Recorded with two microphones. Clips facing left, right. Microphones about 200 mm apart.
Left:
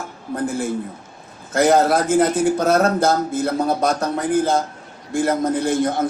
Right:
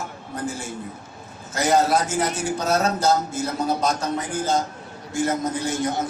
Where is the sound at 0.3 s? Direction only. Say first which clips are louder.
Left 7 dB; 55° left (ahead or behind).